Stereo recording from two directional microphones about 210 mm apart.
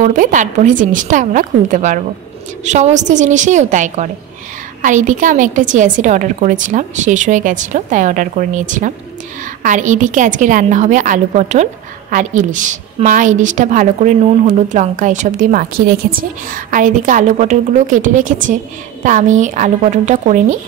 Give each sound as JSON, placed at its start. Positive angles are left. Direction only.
{"t": 0.0, "sound": "a woman's voice", "side_deg": -40}